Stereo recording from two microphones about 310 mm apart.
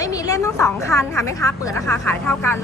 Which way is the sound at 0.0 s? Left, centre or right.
Centre.